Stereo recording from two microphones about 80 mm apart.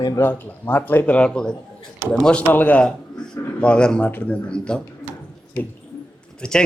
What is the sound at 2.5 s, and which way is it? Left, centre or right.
Speech, left.